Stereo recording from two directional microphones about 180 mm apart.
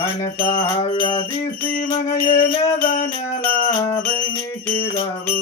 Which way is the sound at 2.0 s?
55° left (ahead or behind).